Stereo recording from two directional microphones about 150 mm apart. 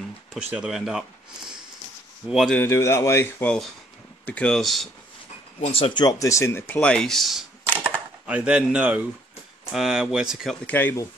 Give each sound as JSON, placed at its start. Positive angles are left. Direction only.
{"t": 0.5, "sound": "speech", "side_deg": -5}
{"t": 2.2, "sound": "speech", "side_deg": 0}
{"t": 2.5, "sound": "speech", "side_deg": 15}
{"t": 5.6, "sound": "speech", "side_deg": 40}
{"t": 6.0, "sound": "speech", "side_deg": 20}
{"t": 8.3, "sound": "speech", "side_deg": -10}
{"t": 10.7, "sound": "speech", "side_deg": 15}